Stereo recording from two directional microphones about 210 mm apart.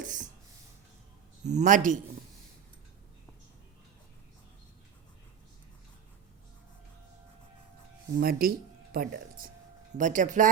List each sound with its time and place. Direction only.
0.0 s a sound: 40° right (ahead or behind)
1.5 s speech: 35° right (ahead or behind)
8.2 s speech: 45° right (ahead or behind)